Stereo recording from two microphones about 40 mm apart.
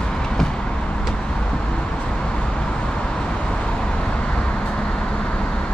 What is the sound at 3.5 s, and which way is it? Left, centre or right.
Vehicle, left.